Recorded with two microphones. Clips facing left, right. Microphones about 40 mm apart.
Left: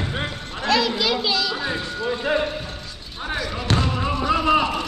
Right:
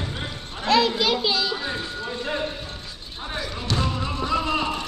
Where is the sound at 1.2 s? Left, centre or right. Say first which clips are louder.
Left 1 dB; left.